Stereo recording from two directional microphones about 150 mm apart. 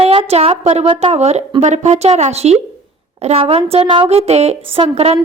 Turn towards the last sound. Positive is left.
turn(degrees=-45)  # may be behind; listen again after turning